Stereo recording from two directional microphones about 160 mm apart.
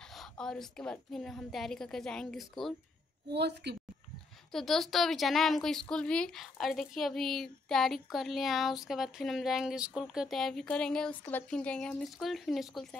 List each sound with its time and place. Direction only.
0.1 s a woman's voice: centre (ahead or behind)
3.3 s a woman's voice: 90° right
4.5 s a woman's voice: centre (ahead or behind)